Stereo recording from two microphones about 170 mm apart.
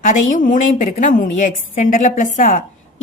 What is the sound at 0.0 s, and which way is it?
A woman's voice, 50° left (ahead or behind).